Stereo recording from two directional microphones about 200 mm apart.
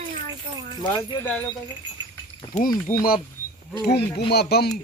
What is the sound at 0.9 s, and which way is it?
Speech, 20° left (ahead or behind).